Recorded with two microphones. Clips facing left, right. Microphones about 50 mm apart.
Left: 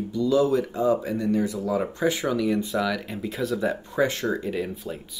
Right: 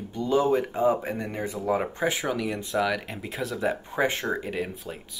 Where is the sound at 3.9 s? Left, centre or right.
Right.